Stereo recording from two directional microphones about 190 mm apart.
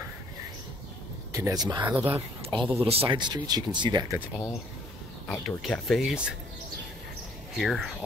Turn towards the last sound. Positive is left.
turn(degrees=0)  # may be behind; listen again after turning